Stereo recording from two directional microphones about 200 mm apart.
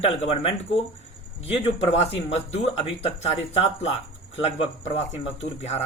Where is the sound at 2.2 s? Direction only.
30° left (ahead or behind).